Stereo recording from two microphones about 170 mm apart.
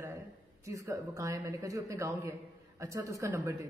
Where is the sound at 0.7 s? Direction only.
20° right (ahead or behind).